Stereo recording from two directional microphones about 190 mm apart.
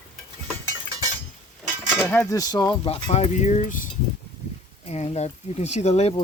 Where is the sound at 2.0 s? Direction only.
15° left (ahead or behind).